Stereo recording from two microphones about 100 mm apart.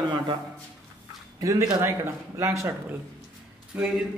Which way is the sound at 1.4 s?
35° right (ahead or behind).